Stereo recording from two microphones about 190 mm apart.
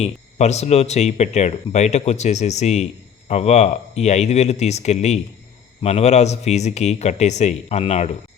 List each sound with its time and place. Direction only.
0.0 s speech: 35° left (ahead or behind)